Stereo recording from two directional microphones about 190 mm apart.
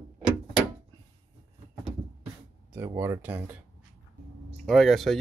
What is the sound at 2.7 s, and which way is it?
Speech, 15° right (ahead or behind).